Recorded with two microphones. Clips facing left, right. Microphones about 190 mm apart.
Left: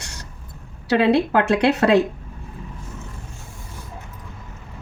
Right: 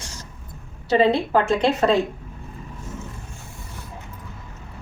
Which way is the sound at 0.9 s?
70° left (ahead or behind).